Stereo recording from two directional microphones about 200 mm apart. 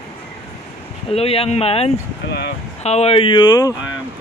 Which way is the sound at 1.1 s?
30° left (ahead or behind).